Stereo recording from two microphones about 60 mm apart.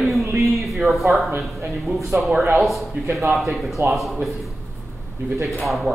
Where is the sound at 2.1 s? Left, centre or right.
Right.